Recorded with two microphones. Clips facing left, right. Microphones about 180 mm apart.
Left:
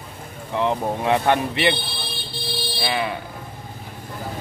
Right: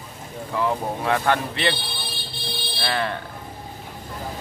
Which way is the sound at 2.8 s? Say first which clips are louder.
Even; 10° left (ahead or behind).